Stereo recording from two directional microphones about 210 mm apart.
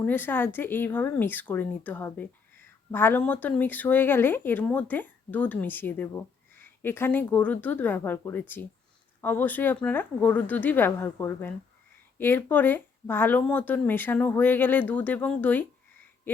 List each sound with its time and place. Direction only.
0.0 s speech: 10° left (ahead or behind)